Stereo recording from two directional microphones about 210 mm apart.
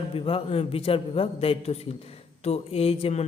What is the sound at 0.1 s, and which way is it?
A man's voice, 25° left (ahead or behind).